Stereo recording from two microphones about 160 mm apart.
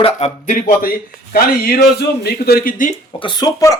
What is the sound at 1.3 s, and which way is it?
A man's voice, 75° left (ahead or behind).